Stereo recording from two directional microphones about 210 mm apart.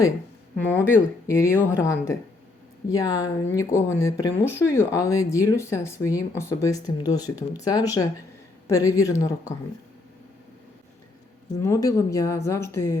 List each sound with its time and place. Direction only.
0.6 s speech: 10° left (ahead or behind)
11.5 s speech: 15° left (ahead or behind)